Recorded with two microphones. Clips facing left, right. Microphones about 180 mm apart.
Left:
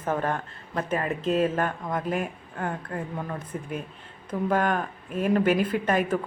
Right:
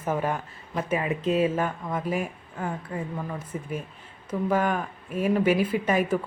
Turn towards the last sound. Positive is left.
turn(degrees=-10)  # may be behind; listen again after turning